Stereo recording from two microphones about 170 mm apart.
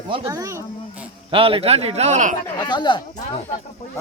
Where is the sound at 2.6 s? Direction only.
25° left (ahead or behind).